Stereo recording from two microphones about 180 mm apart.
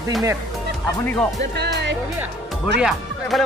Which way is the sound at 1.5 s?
70° right (ahead or behind).